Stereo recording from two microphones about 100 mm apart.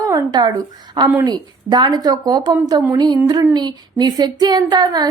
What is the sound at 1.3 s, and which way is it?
Speech, 45° right (ahead or behind).